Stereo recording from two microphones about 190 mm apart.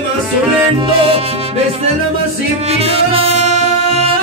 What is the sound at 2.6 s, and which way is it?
Music, 30° right (ahead or behind).